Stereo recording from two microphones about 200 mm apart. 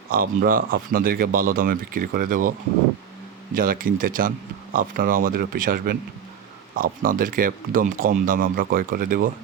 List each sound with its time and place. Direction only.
0.1 s speech: 45° right (ahead or behind)
3.5 s speech: 45° right (ahead or behind)